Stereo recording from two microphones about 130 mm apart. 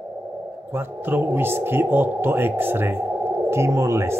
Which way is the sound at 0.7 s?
15° right (ahead or behind).